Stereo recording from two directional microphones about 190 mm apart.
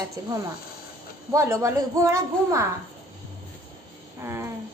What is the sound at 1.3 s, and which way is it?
A child's voice, 15° right (ahead or behind).